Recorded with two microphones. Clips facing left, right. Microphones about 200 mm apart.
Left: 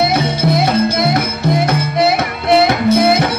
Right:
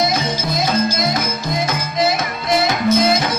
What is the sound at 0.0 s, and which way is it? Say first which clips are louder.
Music: left 5 dB; 65° left (ahead or behind).